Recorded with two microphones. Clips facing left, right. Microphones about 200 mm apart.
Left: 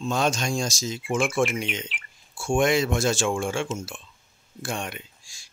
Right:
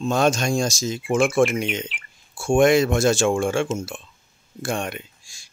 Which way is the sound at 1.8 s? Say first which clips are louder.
Right 3 dB; centre (ahead or behind).